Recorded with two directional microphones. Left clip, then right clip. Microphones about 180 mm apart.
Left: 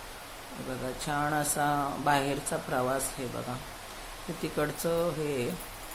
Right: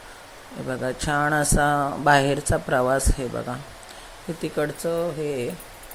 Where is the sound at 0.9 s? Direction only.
30° right (ahead or behind).